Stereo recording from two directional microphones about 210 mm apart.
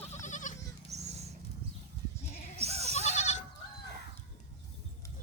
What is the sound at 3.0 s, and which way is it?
Goat, 30° left (ahead or behind).